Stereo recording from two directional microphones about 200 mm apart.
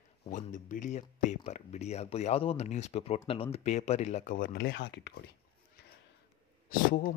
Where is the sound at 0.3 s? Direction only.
40° left (ahead or behind); by 5.1 s 60° left (ahead or behind).